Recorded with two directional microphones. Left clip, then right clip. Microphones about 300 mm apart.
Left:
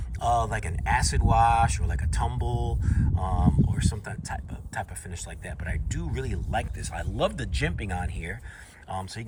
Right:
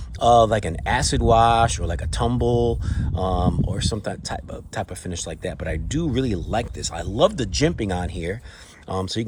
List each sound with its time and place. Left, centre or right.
0.2 s speech: centre